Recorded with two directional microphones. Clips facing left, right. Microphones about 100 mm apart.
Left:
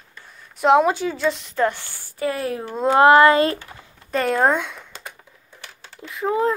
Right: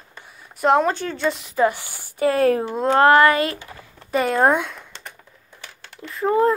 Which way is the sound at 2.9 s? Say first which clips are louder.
Left 2 dB; 20° left (ahead or behind).